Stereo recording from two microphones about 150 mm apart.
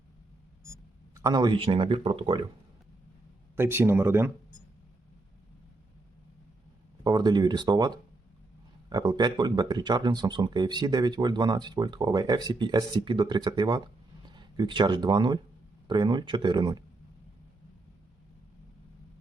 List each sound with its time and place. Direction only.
1.1 s speech: 25° right (ahead or behind)
3.5 s speech: 15° right (ahead or behind)
7.0 s speech: 25° right (ahead or behind)